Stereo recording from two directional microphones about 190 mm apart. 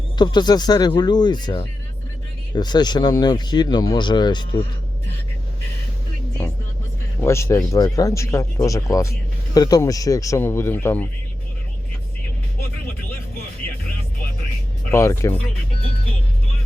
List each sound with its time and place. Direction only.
0.2 s speech: 25° left (ahead or behind)
7.2 s speech: 15° left (ahead or behind)
14.8 s speech: 15° left (ahead or behind)